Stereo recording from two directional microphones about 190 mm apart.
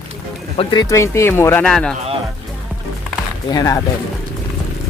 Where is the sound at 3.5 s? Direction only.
15° left (ahead or behind).